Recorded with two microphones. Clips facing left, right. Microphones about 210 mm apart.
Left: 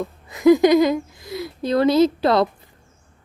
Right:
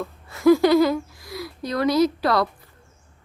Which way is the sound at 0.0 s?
15° left (ahead or behind).